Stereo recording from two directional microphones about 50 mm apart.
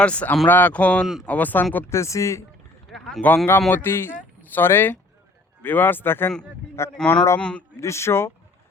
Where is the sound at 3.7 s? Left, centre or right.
Left.